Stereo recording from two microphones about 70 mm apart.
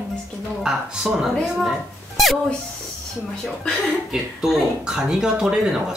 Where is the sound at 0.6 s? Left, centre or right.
Centre.